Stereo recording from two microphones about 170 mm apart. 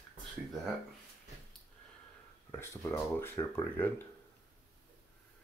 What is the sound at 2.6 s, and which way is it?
Speech, 15° left (ahead or behind).